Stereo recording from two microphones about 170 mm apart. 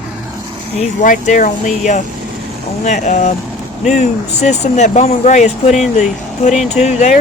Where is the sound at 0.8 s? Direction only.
45° left (ahead or behind).